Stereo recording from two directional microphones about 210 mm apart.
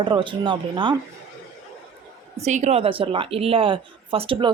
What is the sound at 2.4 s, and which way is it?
Speech, 35° right (ahead or behind).